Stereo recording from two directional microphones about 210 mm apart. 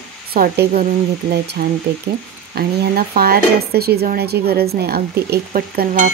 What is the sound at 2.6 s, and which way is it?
Speech, 45° right (ahead or behind).